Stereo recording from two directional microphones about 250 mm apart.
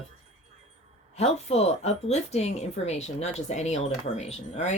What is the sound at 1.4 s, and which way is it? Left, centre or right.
Speech, left.